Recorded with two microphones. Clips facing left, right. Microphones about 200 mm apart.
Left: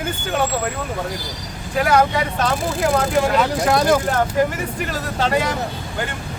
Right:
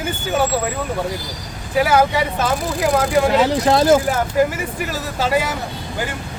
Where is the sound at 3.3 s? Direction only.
25° right (ahead or behind).